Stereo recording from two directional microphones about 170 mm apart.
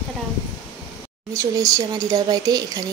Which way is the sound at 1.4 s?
20° right (ahead or behind).